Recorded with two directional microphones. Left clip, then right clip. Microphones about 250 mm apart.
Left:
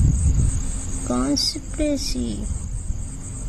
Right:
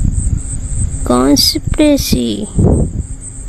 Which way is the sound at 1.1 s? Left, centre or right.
Right.